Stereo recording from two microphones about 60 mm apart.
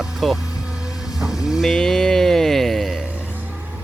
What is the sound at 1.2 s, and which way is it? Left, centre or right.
Vehicle, centre.